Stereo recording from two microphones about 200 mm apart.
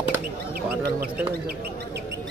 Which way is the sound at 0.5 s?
45° right (ahead or behind).